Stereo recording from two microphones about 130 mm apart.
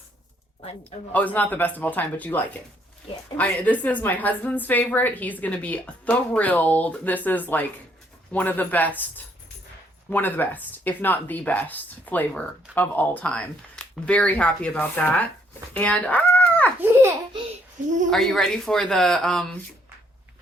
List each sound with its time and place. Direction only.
0.6 s speech: 50° left (ahead or behind)
1.1 s a woman's voice: 10° left (ahead or behind)
16.8 s babbling: 15° right (ahead or behind)
17.8 s speech: 70° right (ahead or behind)
18.1 s speech: centre (ahead or behind)